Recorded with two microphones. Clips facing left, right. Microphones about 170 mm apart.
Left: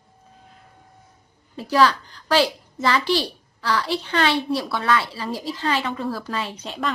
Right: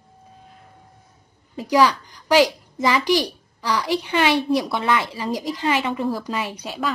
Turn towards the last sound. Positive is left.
turn(degrees=-10)  # may be behind; listen again after turning